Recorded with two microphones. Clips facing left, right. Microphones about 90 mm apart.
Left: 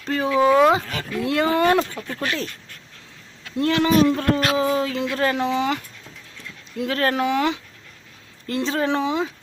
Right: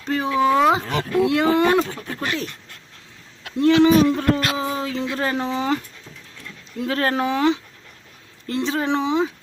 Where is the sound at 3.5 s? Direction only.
20° right (ahead or behind).